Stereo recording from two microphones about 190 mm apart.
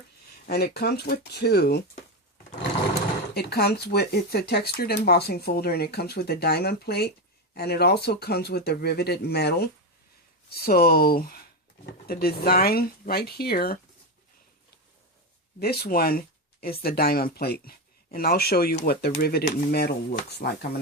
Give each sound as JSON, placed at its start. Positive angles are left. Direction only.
{"t": 0.4, "sound": "speech", "side_deg": 55}
{"t": 3.3, "sound": "speech", "side_deg": 55}
{"t": 15.5, "sound": "speech", "side_deg": 55}